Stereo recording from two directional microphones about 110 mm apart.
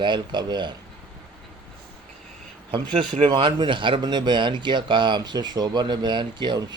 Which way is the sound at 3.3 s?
45° right (ahead or behind).